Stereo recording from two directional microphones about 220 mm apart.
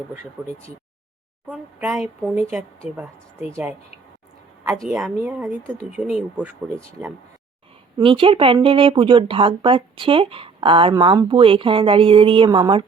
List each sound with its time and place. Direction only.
1.5 s speech: 10° right (ahead or behind)
4.9 s speech: 5° right (ahead or behind)
7.9 s speech: 25° right (ahead or behind)